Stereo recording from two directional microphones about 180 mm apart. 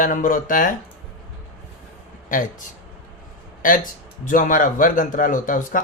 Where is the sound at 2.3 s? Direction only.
50° left (ahead or behind).